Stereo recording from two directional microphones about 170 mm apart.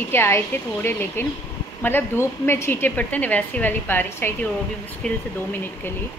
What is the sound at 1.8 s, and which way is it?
A woman's voice, 10° left (ahead or behind).